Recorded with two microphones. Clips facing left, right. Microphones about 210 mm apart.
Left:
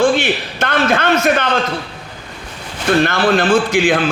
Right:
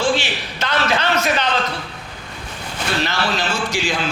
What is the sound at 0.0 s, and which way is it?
A man's voice, 55° left (ahead or behind).